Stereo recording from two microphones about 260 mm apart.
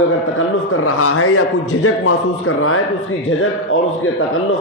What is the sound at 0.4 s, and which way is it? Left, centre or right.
A man's voice, left.